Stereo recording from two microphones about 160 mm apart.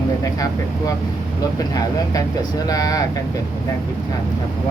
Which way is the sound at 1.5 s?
20° left (ahead or behind).